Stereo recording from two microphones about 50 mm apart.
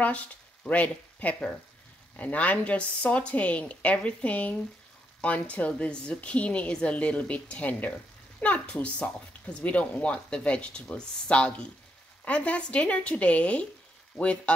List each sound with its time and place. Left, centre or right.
0.7 s a woman's voice: left